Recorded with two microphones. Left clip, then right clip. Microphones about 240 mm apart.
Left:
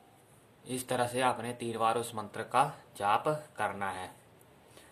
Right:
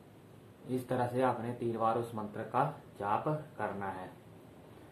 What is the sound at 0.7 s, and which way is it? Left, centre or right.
Speech, left.